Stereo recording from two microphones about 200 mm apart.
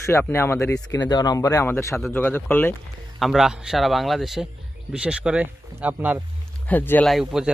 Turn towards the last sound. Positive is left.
turn(degrees=0)  # may be behind; listen again after turning